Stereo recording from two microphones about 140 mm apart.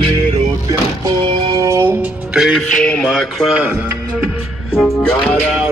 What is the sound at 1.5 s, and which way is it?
Music, 20° right (ahead or behind).